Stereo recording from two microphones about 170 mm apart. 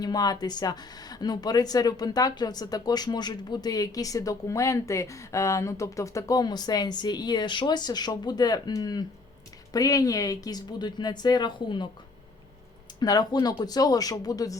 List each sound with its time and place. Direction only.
0.0 s speech: 25° left (ahead or behind)
13.0 s speech: 25° left (ahead or behind)